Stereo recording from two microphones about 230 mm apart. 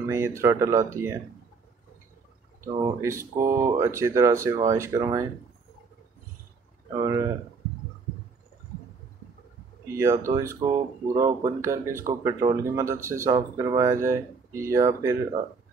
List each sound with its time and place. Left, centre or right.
0.0 s speech: centre
2.6 s speech: centre
7.0 s speech: centre
9.9 s speech: centre